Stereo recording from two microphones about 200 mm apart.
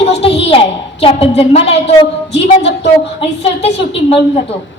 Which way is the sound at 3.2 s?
30° left (ahead or behind).